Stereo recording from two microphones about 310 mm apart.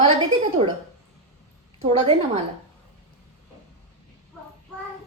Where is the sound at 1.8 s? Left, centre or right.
Right.